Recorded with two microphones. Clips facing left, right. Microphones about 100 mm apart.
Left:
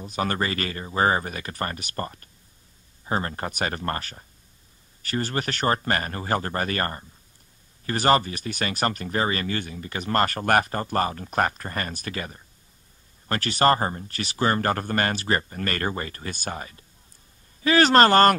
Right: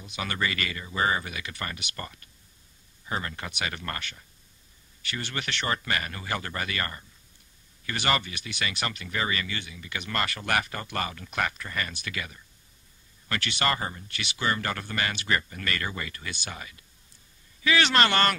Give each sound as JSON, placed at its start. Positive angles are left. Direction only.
{"t": 0.0, "sound": "speech", "side_deg": 40}